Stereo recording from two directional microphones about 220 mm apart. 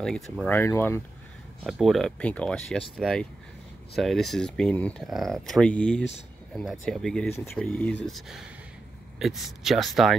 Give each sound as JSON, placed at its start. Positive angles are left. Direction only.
{"t": 0.0, "sound": "speech", "side_deg": 5}
{"t": 1.6, "sound": "speech", "side_deg": 0}